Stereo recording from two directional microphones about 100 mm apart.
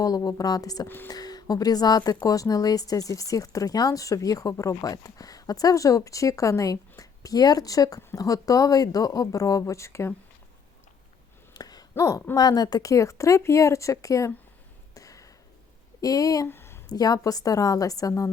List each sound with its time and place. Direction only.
0.0 s speech: 35° left (ahead or behind)
0.9 s speech: 20° left (ahead or behind)
1.1 s speech: 40° left (ahead or behind)
11.5 s a sound: 40° left (ahead or behind)
12.4 s speech: 40° left (ahead or behind)
14.9 s a sound: 35° left (ahead or behind)
16.0 s speech: 35° left (ahead or behind)
16.5 s a sound: 25° left (ahead or behind)
16.9 s speech: 40° left (ahead or behind)